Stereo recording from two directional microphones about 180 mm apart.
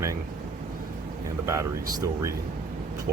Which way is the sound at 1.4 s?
15° right (ahead or behind).